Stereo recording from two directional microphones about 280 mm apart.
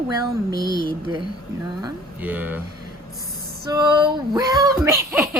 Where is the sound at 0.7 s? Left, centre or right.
Left.